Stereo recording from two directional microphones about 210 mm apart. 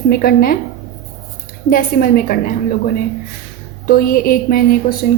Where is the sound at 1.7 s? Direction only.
40° left (ahead or behind).